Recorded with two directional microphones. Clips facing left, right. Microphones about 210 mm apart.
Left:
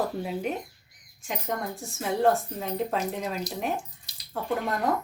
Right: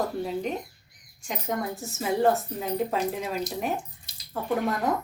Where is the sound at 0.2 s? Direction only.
5° left (ahead or behind).